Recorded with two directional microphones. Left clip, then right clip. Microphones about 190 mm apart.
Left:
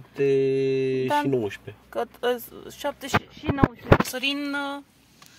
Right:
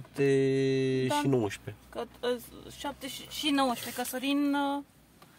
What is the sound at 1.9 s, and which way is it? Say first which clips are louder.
Speech: left 7 dB; 55° left (ahead or behind).